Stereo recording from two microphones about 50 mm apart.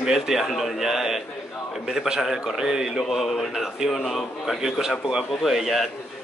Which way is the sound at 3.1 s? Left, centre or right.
Centre.